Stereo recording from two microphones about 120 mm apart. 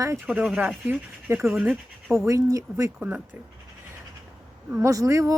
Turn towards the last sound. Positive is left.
turn(degrees=-25)  # may be behind; listen again after turning